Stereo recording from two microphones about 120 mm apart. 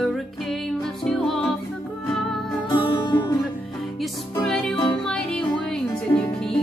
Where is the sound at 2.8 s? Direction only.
40° left (ahead or behind).